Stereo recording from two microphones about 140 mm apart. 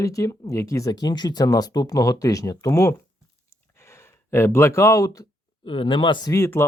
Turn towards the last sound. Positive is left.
turn(degrees=20)  # may be behind; listen again after turning